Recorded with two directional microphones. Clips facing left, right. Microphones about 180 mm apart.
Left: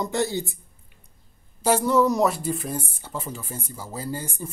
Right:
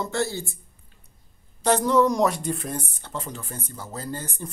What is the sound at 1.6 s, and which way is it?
Speech, 5° left (ahead or behind).